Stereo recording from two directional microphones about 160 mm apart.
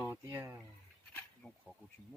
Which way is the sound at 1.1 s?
5° left (ahead or behind).